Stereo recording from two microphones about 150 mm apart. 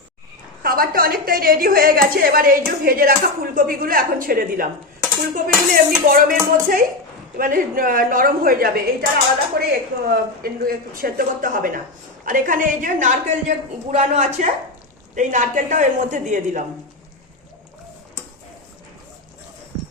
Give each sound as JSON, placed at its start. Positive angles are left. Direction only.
{"t": 0.6, "sound": "a woman's voice", "side_deg": -80}
{"t": 10.1, "sound": "a woman's voice", "side_deg": -80}